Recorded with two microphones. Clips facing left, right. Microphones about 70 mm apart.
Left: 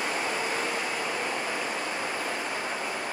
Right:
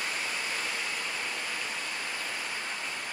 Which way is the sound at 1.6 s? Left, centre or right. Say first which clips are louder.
Left 6 dB; left.